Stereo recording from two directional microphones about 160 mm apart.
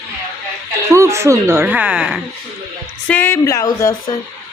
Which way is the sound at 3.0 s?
10° left (ahead or behind).